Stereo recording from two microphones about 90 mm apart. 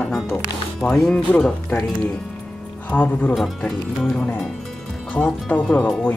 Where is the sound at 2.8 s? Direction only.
20° left (ahead or behind).